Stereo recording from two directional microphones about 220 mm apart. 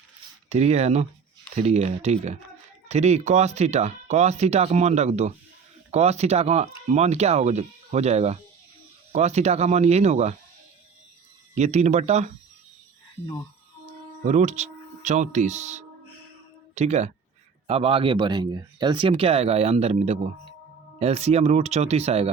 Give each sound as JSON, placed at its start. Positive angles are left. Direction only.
{"t": 0.5, "sound": "speech", "side_deg": -30}
{"t": 11.5, "sound": "speech", "side_deg": -30}
{"t": 13.8, "sound": "speech", "side_deg": -35}